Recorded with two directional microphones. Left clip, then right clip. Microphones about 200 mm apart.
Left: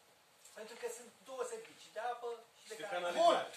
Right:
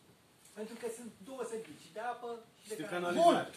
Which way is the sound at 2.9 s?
50° right (ahead or behind).